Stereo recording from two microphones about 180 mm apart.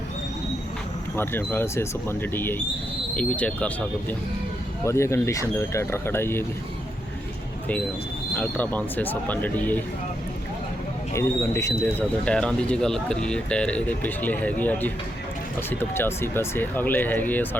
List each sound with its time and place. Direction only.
1.1 s speech: 10° left (ahead or behind)
8.4 s speech: 10° left (ahead or behind)
11.1 s speech: 15° left (ahead or behind)